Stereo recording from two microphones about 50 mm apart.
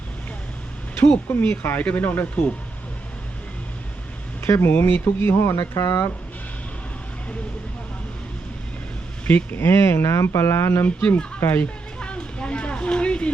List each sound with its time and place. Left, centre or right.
1.3 s speech: left
4.4 s speech: left
5.5 s speech: left
9.2 s speech: left
9.6 s speech: left
10.0 s speech: left
11.3 s speech: left
11.9 s a sound: left